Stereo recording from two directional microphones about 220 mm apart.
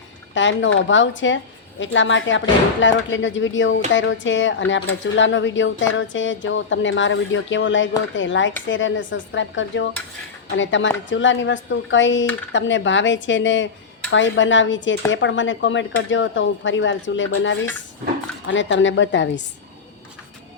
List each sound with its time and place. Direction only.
0.3 s speech: 55° left (ahead or behind)